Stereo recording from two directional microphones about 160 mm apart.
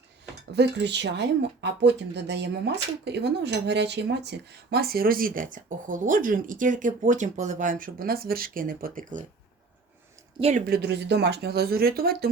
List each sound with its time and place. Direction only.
0.5 s speech: 90° right; by 9.2 s 55° right (ahead or behind)
10.7 s speech: 90° right; by 12.3 s 70° right (ahead or behind)